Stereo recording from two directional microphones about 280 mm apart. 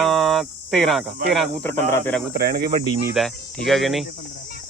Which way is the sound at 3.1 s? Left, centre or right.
Centre.